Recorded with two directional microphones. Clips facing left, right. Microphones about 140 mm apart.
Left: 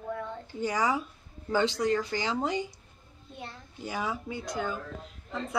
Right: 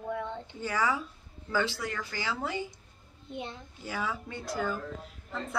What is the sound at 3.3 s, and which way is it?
Speech, 20° right (ahead or behind).